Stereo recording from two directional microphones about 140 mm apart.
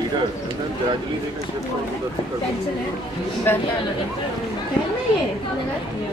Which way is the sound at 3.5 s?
15° left (ahead or behind).